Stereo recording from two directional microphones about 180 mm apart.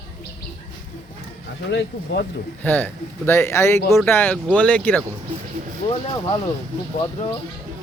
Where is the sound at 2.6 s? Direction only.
10° left (ahead or behind).